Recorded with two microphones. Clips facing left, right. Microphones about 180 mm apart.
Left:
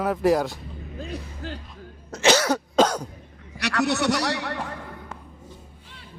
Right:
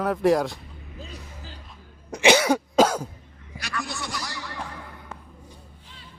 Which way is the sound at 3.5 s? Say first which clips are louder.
Left 10 dB; 75° left (ahead or behind).